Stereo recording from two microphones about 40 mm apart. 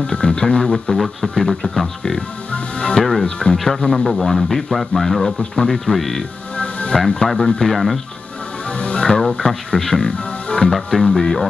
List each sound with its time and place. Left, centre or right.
0.0 s speech: left
0.9 s speech: centre
2.5 s speech: left
3.0 s speech: centre
3.3 s speech: left
3.6 s a man's voice: centre
5.4 s speech: centre
5.9 s a man's voice: centre
6.5 s music: left
7.3 s speech: centre
7.7 s a man's voice: centre
8.6 s music: left
9.7 s speech: centre
10.7 s speech: centre